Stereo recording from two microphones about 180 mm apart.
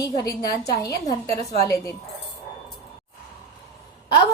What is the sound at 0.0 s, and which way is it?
Speech, 20° left (ahead or behind).